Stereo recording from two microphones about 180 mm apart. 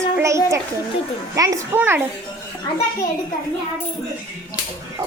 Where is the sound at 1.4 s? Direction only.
20° right (ahead or behind).